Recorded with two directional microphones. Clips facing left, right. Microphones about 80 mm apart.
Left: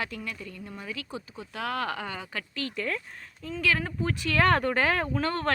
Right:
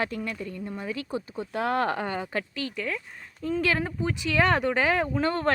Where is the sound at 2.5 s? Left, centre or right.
Centre.